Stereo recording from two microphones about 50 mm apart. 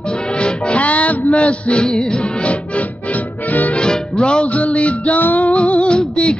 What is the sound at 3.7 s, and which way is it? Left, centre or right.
Music, centre.